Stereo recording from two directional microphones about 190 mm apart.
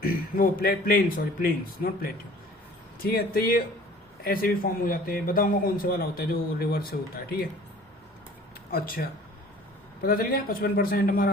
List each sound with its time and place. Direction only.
0.0 s a man's voice: 50° left (ahead or behind)
8.7 s a man's voice: 50° left (ahead or behind)